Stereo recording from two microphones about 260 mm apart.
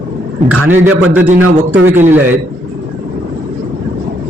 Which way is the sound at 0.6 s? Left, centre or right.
Right.